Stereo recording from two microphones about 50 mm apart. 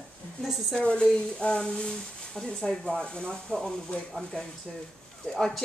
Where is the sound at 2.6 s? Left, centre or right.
Centre.